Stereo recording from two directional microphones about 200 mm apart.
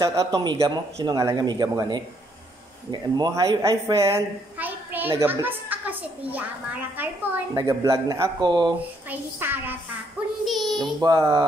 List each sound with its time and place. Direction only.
0.0 s a woman's voice: 15° right (ahead or behind)
9.1 s a woman's voice: 10° right (ahead or behind)
11.0 s a woman's voice: 15° right (ahead or behind)